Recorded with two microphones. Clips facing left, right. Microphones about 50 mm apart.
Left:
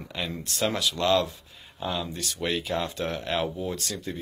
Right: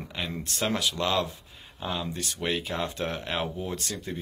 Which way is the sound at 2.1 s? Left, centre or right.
Right.